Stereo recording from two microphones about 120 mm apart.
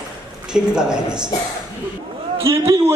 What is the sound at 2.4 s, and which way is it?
Speech, 25° right (ahead or behind).